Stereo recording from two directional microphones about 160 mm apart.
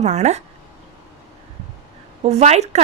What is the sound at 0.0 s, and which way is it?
Speech, 45° right (ahead or behind).